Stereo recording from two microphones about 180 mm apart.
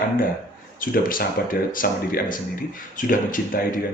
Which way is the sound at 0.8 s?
50° left (ahead or behind).